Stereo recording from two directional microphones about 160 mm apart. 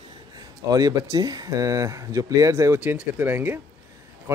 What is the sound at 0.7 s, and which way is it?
Speech, 25° right (ahead or behind).